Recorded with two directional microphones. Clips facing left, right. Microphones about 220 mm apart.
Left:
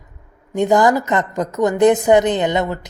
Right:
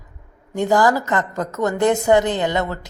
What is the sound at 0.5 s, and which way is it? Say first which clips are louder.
A woman's voice: left 3 dB; 20° left (ahead or behind).